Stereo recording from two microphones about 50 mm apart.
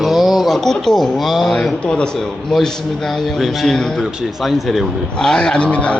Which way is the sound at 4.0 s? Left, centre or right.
Centre.